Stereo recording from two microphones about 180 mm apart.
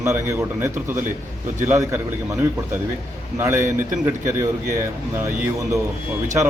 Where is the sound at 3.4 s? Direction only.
15° right (ahead or behind).